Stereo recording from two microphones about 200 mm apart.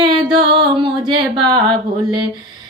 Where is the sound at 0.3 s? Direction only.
25° right (ahead or behind).